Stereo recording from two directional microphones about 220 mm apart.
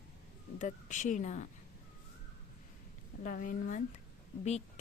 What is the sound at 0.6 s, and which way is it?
Speech, 35° left (ahead or behind).